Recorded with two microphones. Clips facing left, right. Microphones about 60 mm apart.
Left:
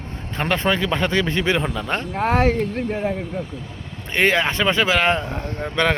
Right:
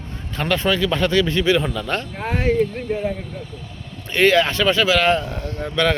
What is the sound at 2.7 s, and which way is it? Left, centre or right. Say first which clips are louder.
Speech: even; left.